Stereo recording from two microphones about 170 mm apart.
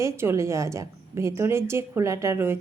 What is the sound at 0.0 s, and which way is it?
A woman's voice, 15° right (ahead or behind).